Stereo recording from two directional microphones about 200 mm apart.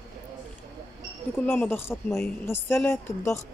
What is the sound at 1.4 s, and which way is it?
A woman's voice, 10° left (ahead or behind).